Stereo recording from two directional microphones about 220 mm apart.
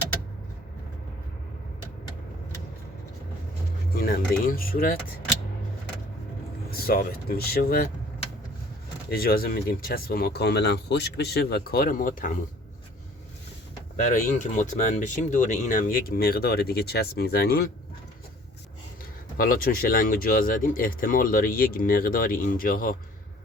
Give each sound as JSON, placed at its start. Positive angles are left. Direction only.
{"t": 3.9, "sound": "speech", "side_deg": 45}
{"t": 6.7, "sound": "speech", "side_deg": 45}
{"t": 9.0, "sound": "speech", "side_deg": 45}
{"t": 13.9, "sound": "speech", "side_deg": 35}
{"t": 19.4, "sound": "speech", "side_deg": 40}